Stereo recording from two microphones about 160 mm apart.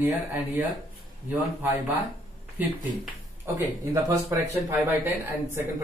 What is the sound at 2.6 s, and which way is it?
Speech, 10° right (ahead or behind).